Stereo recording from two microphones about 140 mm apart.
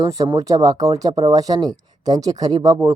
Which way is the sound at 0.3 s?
25° right (ahead or behind).